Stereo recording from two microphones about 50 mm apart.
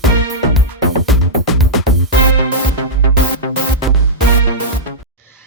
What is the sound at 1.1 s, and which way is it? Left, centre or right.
Music, centre.